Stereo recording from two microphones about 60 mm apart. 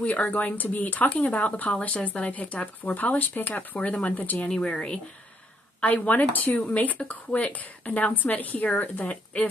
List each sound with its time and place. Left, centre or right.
0.0 s a woman's voice: left